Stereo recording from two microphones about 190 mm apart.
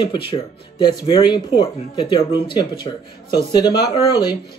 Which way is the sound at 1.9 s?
25° left (ahead or behind).